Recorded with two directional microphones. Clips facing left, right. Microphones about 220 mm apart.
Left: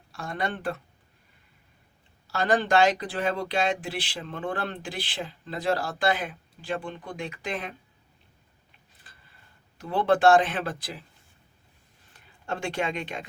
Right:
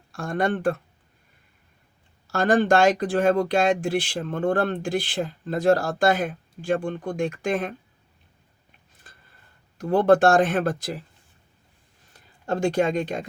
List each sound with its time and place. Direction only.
0.1 s speech: 50° right (ahead or behind)
2.2 s speech: 50° right (ahead or behind)
9.7 s speech: 45° right (ahead or behind)
12.1 s speech: 40° right (ahead or behind)